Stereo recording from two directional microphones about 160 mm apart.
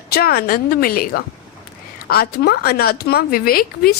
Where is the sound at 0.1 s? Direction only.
70° left (ahead or behind).